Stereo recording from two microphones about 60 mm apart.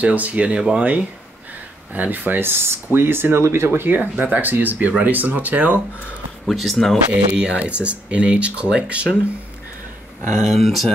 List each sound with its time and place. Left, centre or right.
0.0 s speech: right
6.5 s speech: centre
7.1 s speech: right
10.5 s speech: centre